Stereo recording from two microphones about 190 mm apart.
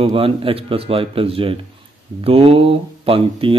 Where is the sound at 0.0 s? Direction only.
30° right (ahead or behind).